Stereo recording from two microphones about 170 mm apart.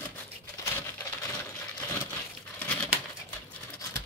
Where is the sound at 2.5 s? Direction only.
5° left (ahead or behind).